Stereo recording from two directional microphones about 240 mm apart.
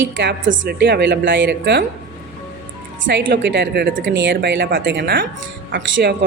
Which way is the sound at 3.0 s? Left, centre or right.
Right.